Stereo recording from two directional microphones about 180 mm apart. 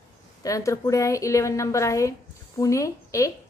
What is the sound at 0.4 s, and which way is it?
A woman's voice, 20° left (ahead or behind).